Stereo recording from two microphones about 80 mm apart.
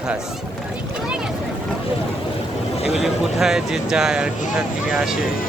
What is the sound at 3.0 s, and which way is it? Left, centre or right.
Speech, centre.